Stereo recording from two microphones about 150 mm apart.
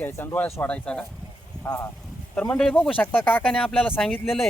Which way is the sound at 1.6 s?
20° left (ahead or behind).